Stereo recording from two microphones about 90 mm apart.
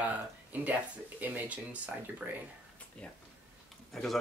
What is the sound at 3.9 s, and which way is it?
Speech, 5° left (ahead or behind).